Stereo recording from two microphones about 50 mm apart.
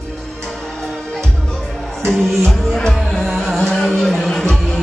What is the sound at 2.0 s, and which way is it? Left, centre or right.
Music, centre.